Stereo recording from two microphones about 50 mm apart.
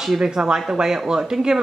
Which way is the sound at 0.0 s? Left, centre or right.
Centre.